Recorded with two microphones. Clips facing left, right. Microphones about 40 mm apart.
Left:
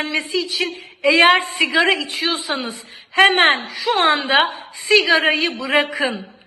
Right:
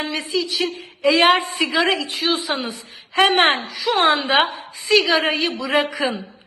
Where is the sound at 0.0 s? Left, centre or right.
Left.